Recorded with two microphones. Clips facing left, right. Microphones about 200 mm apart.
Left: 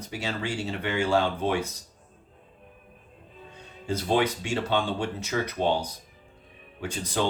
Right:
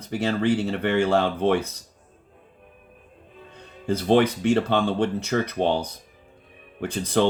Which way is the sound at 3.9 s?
55° right (ahead or behind).